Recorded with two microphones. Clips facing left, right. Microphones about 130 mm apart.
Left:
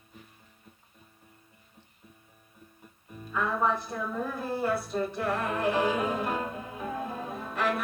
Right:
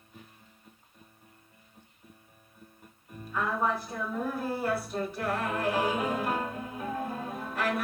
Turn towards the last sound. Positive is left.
turn(degrees=0)  # may be behind; listen again after turning